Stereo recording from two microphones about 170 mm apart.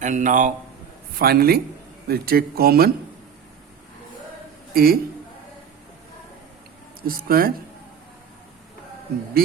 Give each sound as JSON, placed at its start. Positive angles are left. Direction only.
{"t": 0.0, "sound": "a man's voice", "side_deg": -45}
{"t": 1.2, "sound": "speech", "side_deg": -65}
{"t": 4.7, "sound": "a man's voice", "side_deg": -60}
{"t": 7.0, "sound": "speech", "side_deg": -60}